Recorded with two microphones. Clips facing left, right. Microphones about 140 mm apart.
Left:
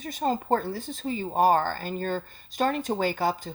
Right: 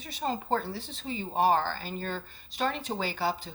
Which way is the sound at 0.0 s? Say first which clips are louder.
Left 5 dB; 45° left (ahead or behind).